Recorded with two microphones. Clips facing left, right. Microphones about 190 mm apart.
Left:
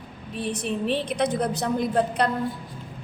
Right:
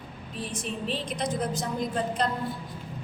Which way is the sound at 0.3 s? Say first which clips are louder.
Left 6 dB; 65° left (ahead or behind).